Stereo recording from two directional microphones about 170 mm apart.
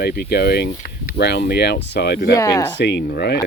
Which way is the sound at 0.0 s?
70° left (ahead or behind).